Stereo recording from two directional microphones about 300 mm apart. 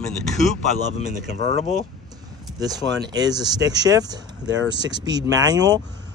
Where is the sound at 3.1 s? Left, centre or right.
Centre.